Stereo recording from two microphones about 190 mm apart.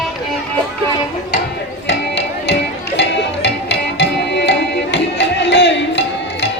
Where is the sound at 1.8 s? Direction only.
70° left (ahead or behind).